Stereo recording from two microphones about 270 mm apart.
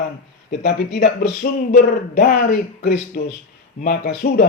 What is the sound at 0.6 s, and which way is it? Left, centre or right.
Speech, left.